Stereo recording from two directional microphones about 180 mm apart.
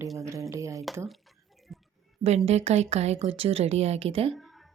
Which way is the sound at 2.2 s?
35° right (ahead or behind).